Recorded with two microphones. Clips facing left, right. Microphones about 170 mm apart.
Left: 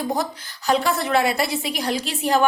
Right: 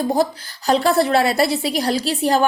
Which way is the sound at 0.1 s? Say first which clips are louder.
Right 6 dB; 35° right (ahead or behind).